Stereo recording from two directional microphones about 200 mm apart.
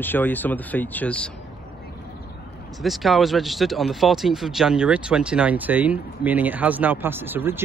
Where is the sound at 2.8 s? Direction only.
Centre (ahead or behind).